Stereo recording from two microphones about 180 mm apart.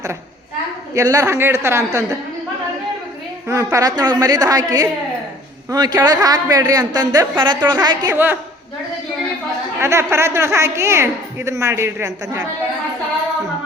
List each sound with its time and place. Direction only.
0.9 s a woman's voice: 15° right (ahead or behind)
3.4 s a woman's voice: 15° right (ahead or behind)
9.8 s a woman's voice: 15° right (ahead or behind)